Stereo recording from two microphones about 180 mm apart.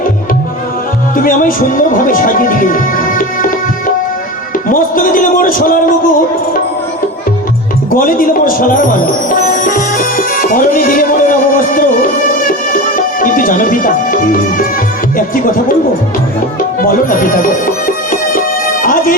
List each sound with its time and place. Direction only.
1.1 s a man's voice: 50° left (ahead or behind)
7.9 s speech: 50° left (ahead or behind)
12.3 s music: 50° left (ahead or behind)
16.8 s music: 50° left (ahead or behind)